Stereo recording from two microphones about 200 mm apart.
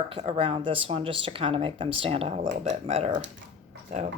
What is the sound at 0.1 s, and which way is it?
Speech, 30° right (ahead or behind).